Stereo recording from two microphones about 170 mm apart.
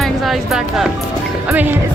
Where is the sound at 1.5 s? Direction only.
10° right (ahead or behind).